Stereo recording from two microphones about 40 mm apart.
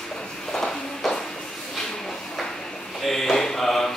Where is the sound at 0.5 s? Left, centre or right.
Centre.